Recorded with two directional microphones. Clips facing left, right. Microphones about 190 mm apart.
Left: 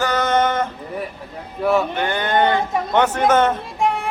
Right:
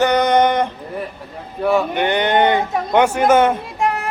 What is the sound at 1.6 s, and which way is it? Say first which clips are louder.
Speech: right 1 dB; centre (ahead or behind).